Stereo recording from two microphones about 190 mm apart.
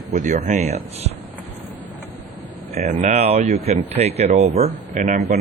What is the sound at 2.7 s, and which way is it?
A man's voice, 40° right (ahead or behind).